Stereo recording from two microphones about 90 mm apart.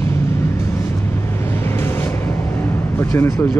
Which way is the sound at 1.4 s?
25° left (ahead or behind).